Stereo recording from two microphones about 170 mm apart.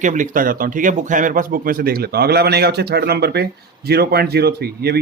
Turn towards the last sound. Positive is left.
turn(degrees=-70)  # may be behind; listen again after turning